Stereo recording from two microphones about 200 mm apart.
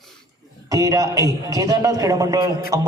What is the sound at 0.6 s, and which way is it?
A man's voice, 15° right (ahead or behind).